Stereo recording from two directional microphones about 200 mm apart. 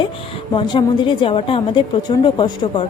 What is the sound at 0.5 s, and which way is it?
A woman's voice, 25° left (ahead or behind).